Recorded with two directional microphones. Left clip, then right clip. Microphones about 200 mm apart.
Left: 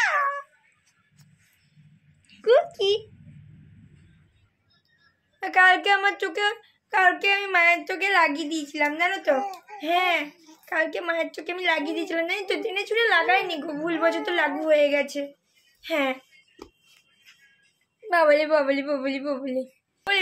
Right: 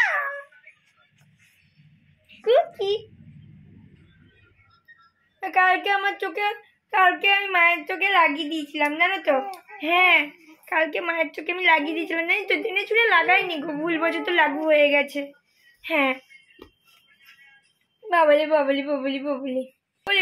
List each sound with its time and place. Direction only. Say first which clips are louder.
0.0 s cat: even; 5° left (ahead or behind)
2.5 s a sound: even; 5° left (ahead or behind)
5.4 s a woman's voice: left 2 dB; centre (ahead or behind); by 16.2 s 20° right (ahead or behind)
18.0 s speech: right 1 dB; 10° right (ahead or behind)